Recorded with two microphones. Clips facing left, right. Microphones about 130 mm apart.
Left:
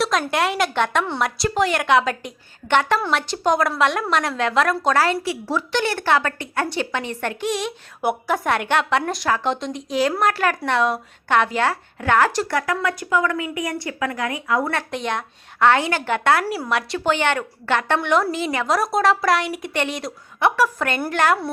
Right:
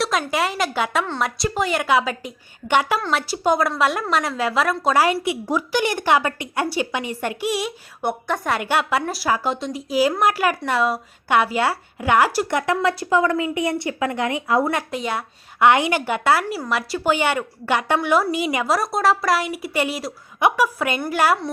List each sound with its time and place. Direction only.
0.0 s a woman's voice: centre (ahead or behind); by 14.7 s 25° right (ahead or behind)
14.8 s a woman's voice: 5° right (ahead or behind)